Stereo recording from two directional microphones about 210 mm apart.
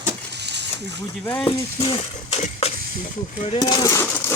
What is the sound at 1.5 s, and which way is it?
Speech, 25° left (ahead or behind).